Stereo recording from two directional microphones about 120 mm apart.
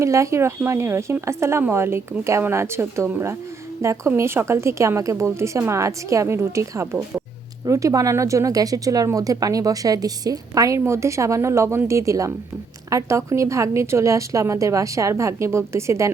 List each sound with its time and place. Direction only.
0.0 s speech: 25° right (ahead or behind)